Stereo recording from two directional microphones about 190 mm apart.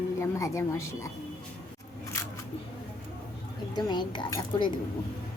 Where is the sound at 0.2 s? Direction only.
15° left (ahead or behind).